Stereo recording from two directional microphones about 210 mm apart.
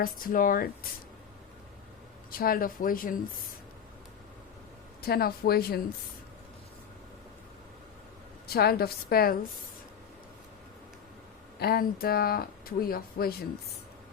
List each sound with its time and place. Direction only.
0.0 s speech: 40° left (ahead or behind)
2.3 s speech: 45° left (ahead or behind)
5.0 s speech: 45° left (ahead or behind)
8.4 s speech: 50° left (ahead or behind)
11.6 s speech: 45° left (ahead or behind)